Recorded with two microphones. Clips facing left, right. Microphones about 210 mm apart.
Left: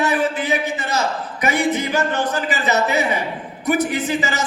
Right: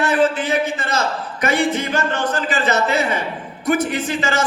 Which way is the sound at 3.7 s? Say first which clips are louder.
Even; 15° left (ahead or behind).